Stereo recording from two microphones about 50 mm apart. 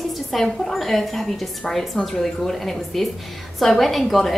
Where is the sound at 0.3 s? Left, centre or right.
Centre.